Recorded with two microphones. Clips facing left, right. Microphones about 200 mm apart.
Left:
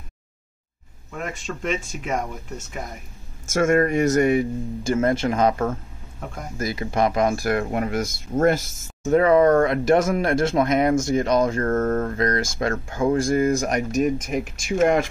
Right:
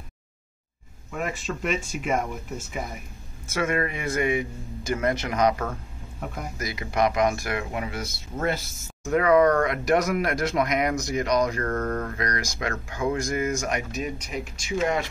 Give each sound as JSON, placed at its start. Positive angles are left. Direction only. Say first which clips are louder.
{"t": 1.1, "sound": "speech", "louder": "right 1 dB", "side_deg": 0}
{"t": 3.4, "sound": "speech", "louder": "left 7 dB", "side_deg": 45}
{"t": 4.8, "sound": "speech", "louder": "left 5 dB", "side_deg": 30}
{"t": 6.1, "sound": "speech", "louder": "even", "side_deg": -5}
{"t": 6.6, "sound": "speech", "louder": "left 3 dB", "side_deg": 30}
{"t": 9.0, "sound": "speech", "louder": "left 3 dB", "side_deg": 30}